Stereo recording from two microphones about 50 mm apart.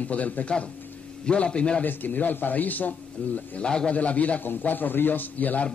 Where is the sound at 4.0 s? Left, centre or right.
Left.